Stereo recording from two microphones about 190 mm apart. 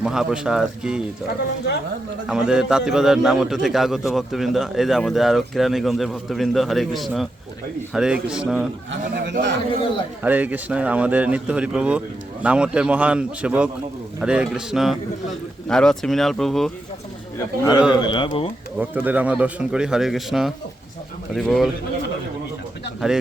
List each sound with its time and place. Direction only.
0.0 s a man's voice: 5° right (ahead or behind)
2.2 s a man's voice: 5° right (ahead or behind)
8.9 s a man's voice: 65° right (ahead or behind)
10.2 s a man's voice: 10° right (ahead or behind)
17.3 s a man's voice: 15° left (ahead or behind)
17.7 s a man's voice: 5° right (ahead or behind)
18.0 s speech: 25° left (ahead or behind)
18.8 s a man's voice: 10° right (ahead or behind)